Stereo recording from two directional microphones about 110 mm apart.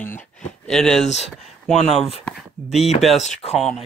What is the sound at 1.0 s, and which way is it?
Speech, 90° left.